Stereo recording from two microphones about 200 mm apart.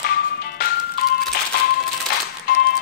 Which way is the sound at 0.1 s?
50° left (ahead or behind).